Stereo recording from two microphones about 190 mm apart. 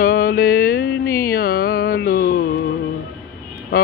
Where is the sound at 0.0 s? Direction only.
50° left (ahead or behind).